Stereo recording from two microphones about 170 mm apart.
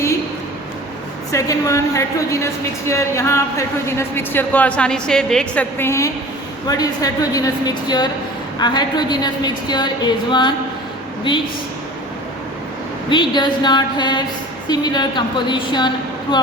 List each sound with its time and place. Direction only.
1.3 s a woman's voice: 20° left (ahead or behind)
13.1 s a woman's voice: 30° left (ahead or behind)